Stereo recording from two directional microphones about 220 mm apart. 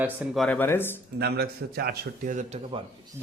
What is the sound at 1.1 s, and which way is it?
A man's voice, 45° right (ahead or behind).